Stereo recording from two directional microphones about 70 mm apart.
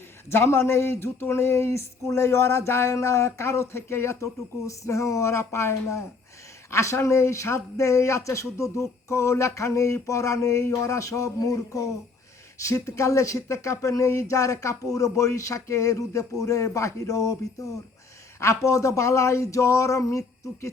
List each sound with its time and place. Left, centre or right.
0.3 s speech: left
18.3 s speech: left